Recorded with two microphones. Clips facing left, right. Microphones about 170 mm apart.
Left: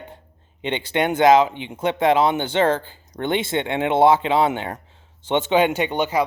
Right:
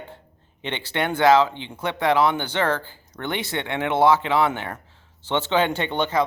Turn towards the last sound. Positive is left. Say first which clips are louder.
# left 2 dB
turn(degrees=10)  # may be behind; listen again after turning